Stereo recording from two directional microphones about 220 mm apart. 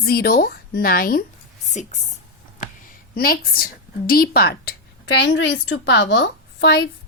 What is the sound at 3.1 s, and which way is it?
A woman's voice, 45° left (ahead or behind).